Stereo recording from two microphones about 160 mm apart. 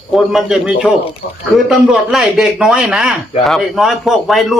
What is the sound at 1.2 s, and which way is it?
Speech, 90° left.